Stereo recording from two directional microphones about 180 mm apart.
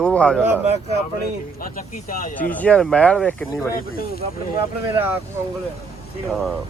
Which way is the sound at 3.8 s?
55° left (ahead or behind).